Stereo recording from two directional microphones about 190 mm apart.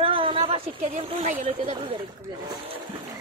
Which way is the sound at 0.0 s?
30° right (ahead or behind).